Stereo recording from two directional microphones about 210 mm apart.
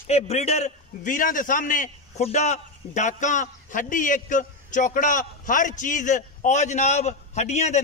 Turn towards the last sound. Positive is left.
turn(degrees=30)  # may be behind; listen again after turning